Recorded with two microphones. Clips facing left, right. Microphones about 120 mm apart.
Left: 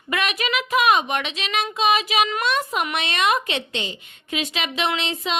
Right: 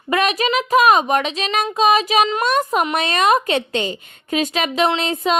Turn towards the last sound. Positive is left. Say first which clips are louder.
# right 7 dB
turn(degrees=-45)  # may be behind; listen again after turning